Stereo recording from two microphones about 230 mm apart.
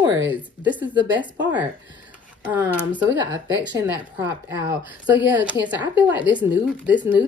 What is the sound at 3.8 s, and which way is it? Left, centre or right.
A woman's voice, centre.